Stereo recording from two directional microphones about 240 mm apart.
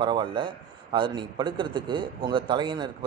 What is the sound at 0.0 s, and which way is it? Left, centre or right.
Speech, centre.